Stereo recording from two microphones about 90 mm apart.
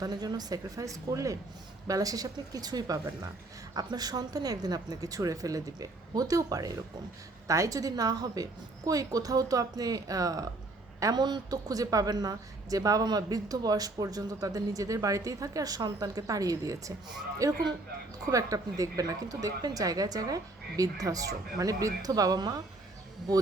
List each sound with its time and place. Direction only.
0.0 s a woman's voice: 50° right (ahead or behind)